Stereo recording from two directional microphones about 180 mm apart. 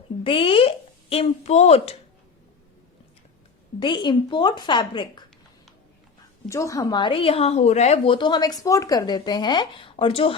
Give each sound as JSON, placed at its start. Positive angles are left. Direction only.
{"t": 0.3, "sound": "a woman's voice", "side_deg": 30}
{"t": 3.8, "sound": "a woman's voice", "side_deg": 25}
{"t": 6.5, "sound": "a woman's voice", "side_deg": 15}